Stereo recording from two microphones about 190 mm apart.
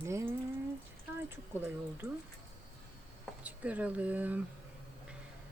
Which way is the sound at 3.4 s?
5° right (ahead or behind).